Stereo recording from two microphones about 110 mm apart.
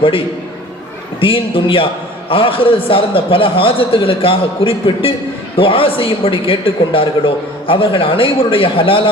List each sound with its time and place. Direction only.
1.2 s a man's voice: 50° left (ahead or behind)